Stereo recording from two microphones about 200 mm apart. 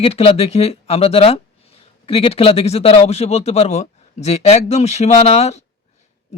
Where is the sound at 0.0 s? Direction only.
30° left (ahead or behind).